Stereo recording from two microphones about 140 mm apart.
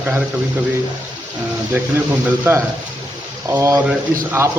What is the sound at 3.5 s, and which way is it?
Speech, 20° right (ahead or behind).